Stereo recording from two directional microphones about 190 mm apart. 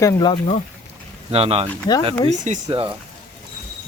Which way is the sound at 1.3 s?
30° right (ahead or behind).